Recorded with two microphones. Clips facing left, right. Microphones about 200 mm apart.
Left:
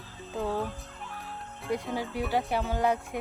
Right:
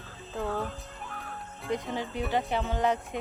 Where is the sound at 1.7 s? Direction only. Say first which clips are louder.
Left 1 dB; 5° left (ahead or behind).